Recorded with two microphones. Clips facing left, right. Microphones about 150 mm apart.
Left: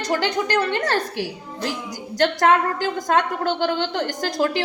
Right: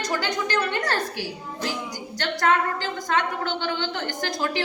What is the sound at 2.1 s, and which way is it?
A woman's voice, 45° left (ahead or behind).